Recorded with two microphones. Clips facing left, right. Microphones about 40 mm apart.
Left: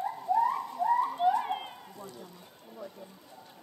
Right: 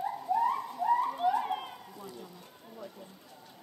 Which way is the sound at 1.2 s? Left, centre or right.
Centre.